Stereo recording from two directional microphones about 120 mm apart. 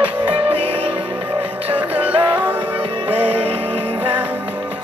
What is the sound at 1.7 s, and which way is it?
Music, 15° right (ahead or behind).